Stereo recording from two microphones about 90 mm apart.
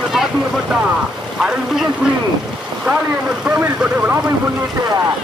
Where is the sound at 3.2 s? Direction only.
10° right (ahead or behind).